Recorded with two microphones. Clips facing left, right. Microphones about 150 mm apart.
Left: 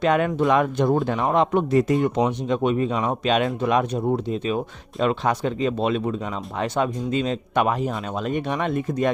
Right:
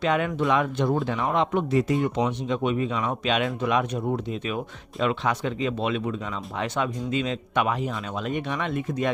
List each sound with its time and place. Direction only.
0.0 s speech: 45° left (ahead or behind)